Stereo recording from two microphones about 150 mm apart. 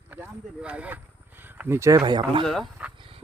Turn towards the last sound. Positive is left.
turn(degrees=-35)  # may be behind; listen again after turning